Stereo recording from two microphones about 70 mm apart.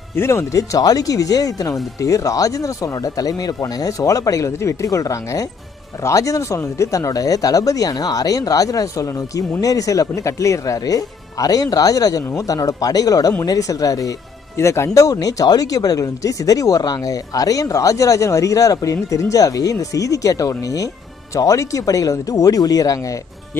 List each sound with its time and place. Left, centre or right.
0.1 s speech: left
4.0 s speech: left
14.6 s speech: left